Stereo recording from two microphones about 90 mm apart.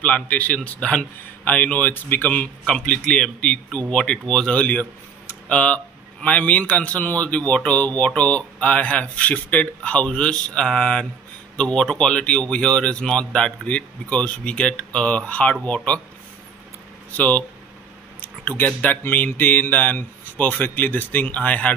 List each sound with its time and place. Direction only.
0.0 s a man's voice: 15° left (ahead or behind)
17.1 s a man's voice: 15° left (ahead or behind)